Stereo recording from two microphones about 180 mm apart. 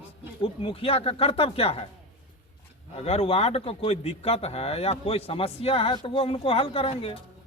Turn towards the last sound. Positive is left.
turn(degrees=30)  # may be behind; listen again after turning